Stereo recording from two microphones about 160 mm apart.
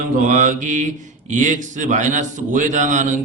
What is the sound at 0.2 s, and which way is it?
A man's voice, 55° right (ahead or behind).